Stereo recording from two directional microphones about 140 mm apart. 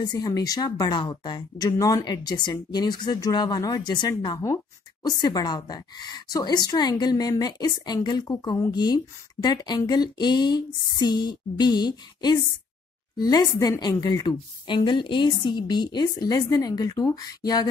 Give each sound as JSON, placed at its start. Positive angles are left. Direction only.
{"t": 0.0, "sound": "a woman's voice", "side_deg": 30}